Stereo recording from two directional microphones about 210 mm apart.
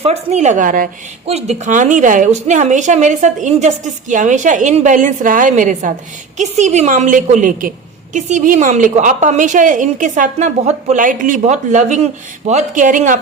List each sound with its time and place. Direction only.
0.0 s a woman's voice: 30° right (ahead or behind)